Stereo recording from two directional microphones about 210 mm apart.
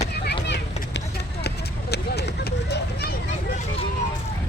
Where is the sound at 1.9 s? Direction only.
50° left (ahead or behind).